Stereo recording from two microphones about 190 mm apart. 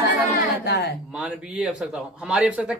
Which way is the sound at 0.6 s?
60° left (ahead or behind).